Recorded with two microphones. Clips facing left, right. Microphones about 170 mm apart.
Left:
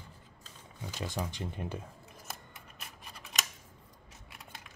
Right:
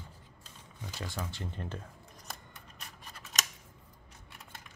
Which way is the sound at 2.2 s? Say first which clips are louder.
Even; 5° left (ahead or behind).